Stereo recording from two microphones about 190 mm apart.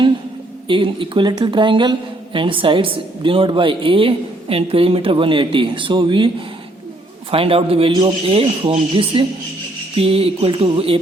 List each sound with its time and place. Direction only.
0.7 s speech: 25° right (ahead or behind)